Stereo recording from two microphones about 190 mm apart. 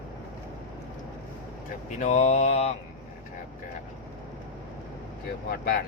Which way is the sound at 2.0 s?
40° left (ahead or behind).